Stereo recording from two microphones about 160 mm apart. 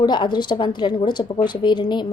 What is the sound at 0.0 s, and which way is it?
A woman's voice, 30° left (ahead or behind).